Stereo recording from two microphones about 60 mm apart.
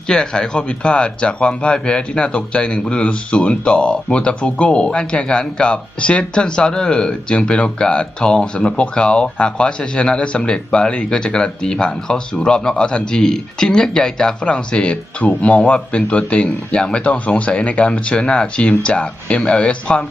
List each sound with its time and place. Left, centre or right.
0.1 s speech: centre
15.3 s speech: left